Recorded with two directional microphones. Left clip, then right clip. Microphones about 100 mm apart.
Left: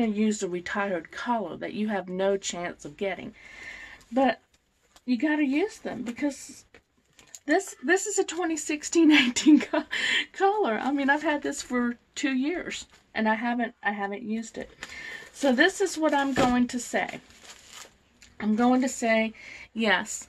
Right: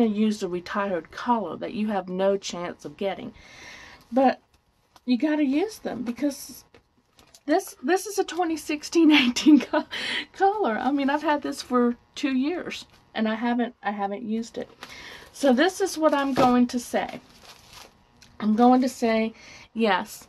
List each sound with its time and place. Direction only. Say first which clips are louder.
0.0 s speech: right 3 dB; 45° right (ahead or behind)
18.4 s speech: right 5 dB; 65° right (ahead or behind); by 19.3 s 50° right (ahead or behind)
19.4 s speech: right 2 dB; 30° right (ahead or behind)